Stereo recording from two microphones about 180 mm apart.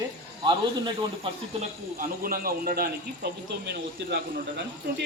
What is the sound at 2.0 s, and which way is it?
Speech, 55° right (ahead or behind).